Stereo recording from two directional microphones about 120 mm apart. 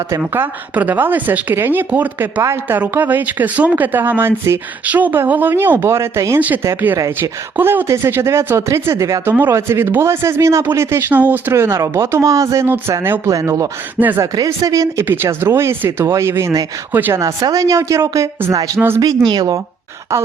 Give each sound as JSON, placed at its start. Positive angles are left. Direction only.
{"t": 0.3, "sound": "speech", "side_deg": -15}
{"t": 14.0, "sound": "speech", "side_deg": -15}
{"t": 14.3, "sound": "speech", "side_deg": -30}
{"t": 15.0, "sound": "speech", "side_deg": -20}